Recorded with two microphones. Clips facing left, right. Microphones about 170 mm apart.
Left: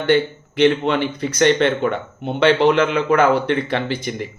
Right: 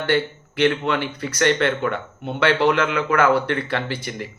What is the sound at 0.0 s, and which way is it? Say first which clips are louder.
Speech: left 4 dB; 20° left (ahead or behind).